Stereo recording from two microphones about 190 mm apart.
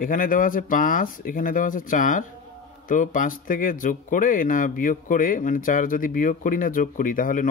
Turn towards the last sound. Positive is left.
turn(degrees=45)  # may be behind; listen again after turning